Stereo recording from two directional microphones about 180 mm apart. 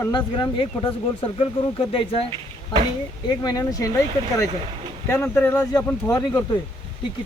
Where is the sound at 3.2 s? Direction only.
20° left (ahead or behind).